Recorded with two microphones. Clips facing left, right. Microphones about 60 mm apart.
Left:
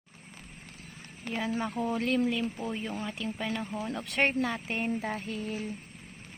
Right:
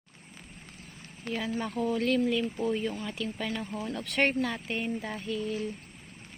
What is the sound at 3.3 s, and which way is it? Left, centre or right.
Speech, centre.